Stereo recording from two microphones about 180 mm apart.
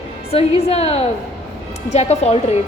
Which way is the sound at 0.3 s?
35° left (ahead or behind).